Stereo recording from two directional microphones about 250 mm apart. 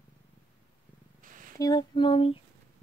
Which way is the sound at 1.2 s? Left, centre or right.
Right.